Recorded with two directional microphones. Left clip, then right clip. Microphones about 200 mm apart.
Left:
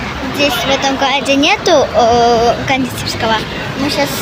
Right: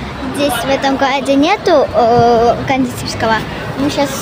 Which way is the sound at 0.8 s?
25° right (ahead or behind).